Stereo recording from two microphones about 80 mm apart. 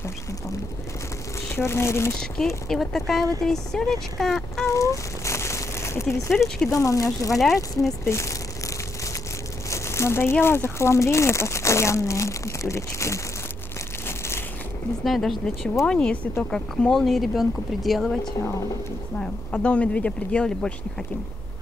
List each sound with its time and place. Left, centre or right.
1.5 s speech: left
2.3 s speech: centre
4.6 s crumpling: left
6.3 s speech: centre
6.7 s speech: left
7.3 s speech: centre
8.0 s speech: left
9.7 s crumpling: left
10.4 s speech: left
15.0 s speech: centre
15.9 s speech: centre
19.1 s speech: centre